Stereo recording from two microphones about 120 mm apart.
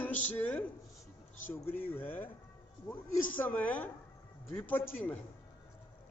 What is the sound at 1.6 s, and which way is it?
Speech, 15° left (ahead or behind).